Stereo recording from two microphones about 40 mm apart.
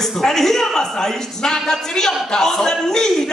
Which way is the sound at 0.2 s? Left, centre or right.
Centre.